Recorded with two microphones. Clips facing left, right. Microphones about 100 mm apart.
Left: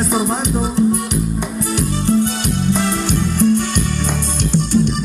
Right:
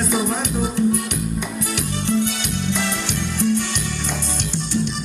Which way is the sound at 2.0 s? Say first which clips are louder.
Left 4 dB; 40° left (ahead or behind).